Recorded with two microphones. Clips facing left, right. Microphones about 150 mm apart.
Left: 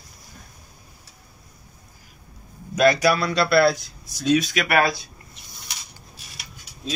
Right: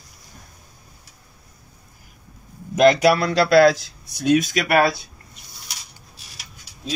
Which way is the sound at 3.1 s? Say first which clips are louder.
Right 4 dB; 80° right.